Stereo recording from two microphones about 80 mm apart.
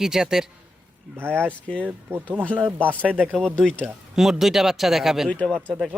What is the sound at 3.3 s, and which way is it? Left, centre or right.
Speech, centre.